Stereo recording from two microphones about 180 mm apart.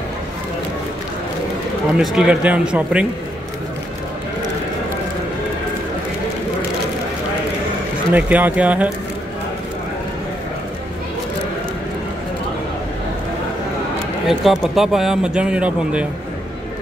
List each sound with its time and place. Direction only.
2.0 s speech: 5° right (ahead or behind)
8.1 s speech: 10° right (ahead or behind)
14.4 s speech: centre (ahead or behind)